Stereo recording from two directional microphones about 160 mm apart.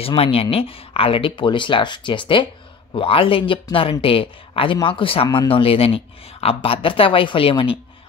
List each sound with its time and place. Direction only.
0.0 s speech: 35° left (ahead or behind)